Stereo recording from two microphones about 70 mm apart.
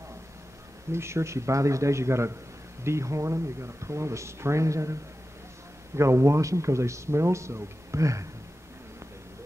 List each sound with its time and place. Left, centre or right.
0.9 s speech: right
5.9 s speech: right